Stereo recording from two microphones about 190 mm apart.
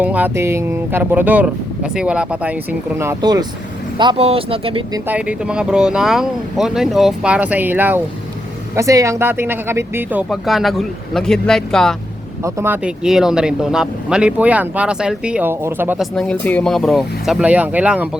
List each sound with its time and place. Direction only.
0.0 s speech: 10° right (ahead or behind); by 4.8 s 30° right (ahead or behind)
5.0 s speech: 5° right (ahead or behind)
12.4 s speech: 10° right (ahead or behind)
16.1 s speech: 5° left (ahead or behind)